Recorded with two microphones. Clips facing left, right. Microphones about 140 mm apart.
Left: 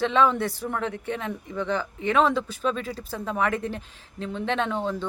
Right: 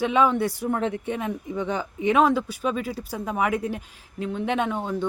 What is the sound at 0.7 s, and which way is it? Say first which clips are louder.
A woman's voice: right 3 dB; 25° right (ahead or behind).